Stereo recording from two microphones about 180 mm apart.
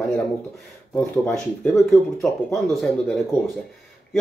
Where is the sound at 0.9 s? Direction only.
10° left (ahead or behind).